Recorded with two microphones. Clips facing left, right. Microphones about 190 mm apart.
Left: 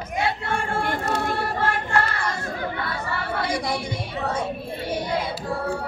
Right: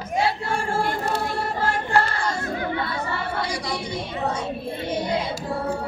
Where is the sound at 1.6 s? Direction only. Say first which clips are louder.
Right 4 dB; 30° right (ahead or behind).